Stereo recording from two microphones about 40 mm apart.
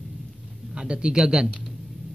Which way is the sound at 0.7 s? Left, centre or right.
Right.